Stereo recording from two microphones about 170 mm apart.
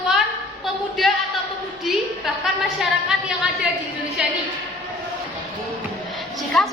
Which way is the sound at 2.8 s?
5° right (ahead or behind).